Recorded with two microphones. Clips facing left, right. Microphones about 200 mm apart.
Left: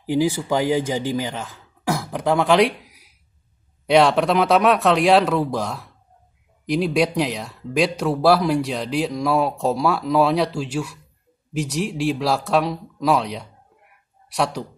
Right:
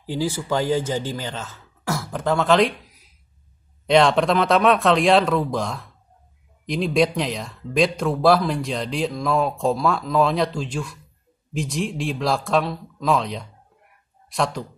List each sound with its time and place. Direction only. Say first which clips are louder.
0.0 s speech: left 5 dB; 15° left (ahead or behind)